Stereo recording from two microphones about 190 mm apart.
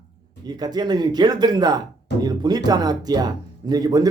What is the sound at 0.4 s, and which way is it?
Speech, 20° right (ahead or behind).